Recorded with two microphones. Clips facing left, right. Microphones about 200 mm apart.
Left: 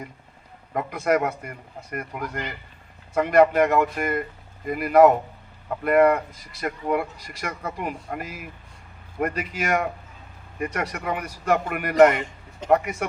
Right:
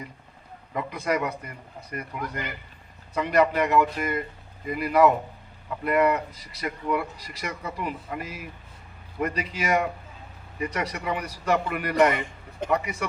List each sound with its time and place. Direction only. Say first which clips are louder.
0.7 s speech: left 4 dB; 50° left (ahead or behind)